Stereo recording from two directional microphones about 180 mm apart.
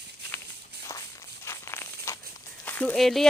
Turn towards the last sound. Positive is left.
turn(degrees=0)  # may be behind; listen again after turning